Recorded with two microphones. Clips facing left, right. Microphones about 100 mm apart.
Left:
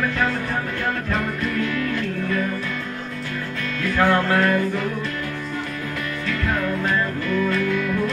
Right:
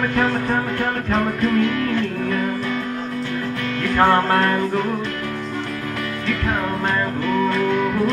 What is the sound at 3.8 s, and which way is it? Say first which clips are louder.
Music: right 3 dB; 50° right (ahead or behind).